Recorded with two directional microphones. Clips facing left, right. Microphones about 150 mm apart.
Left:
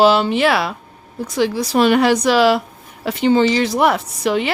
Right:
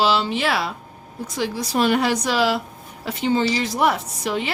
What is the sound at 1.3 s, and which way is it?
A woman's voice, 80° left.